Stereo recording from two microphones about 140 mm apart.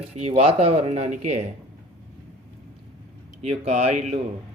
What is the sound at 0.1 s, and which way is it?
Speech, 45° right (ahead or behind).